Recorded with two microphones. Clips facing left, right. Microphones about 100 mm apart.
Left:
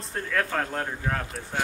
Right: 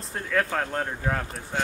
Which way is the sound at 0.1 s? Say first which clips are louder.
Right 1 dB; 5° right (ahead or behind).